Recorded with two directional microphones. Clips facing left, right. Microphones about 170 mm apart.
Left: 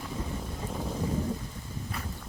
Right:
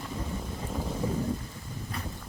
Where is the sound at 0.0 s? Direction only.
Centre (ahead or behind).